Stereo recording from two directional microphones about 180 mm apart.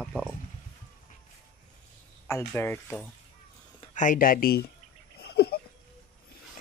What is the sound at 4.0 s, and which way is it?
Speech, 50° left (ahead or behind).